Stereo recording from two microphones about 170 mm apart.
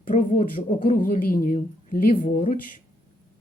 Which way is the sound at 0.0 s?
50° left (ahead or behind).